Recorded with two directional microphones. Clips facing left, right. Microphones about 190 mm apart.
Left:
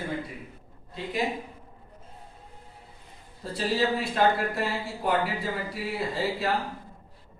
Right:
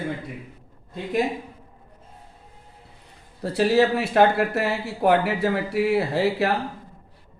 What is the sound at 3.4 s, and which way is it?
Speech, 70° right (ahead or behind).